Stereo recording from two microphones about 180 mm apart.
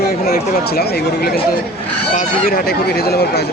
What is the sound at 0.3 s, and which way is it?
Speech, 60° left (ahead or behind).